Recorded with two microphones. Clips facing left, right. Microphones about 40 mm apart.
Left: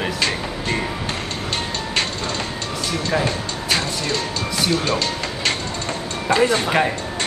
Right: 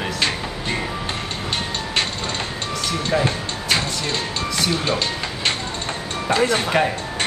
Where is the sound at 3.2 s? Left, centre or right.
Centre.